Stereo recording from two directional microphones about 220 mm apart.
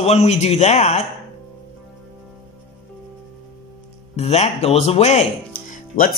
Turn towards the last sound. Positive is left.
turn(degrees=40)  # may be behind; listen again after turning